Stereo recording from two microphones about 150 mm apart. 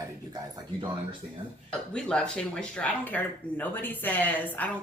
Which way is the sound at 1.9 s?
5° left (ahead or behind).